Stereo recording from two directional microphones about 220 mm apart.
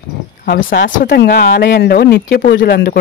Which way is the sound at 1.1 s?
50° left (ahead or behind).